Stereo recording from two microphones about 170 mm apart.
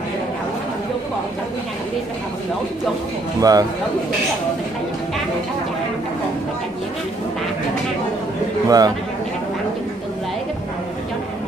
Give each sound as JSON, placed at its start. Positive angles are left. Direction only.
{"t": 3.3, "sound": "a man's voice", "side_deg": -20}
{"t": 8.6, "sound": "a man's voice", "side_deg": -20}